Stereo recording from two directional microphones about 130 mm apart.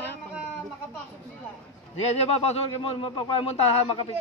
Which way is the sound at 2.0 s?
55° left (ahead or behind).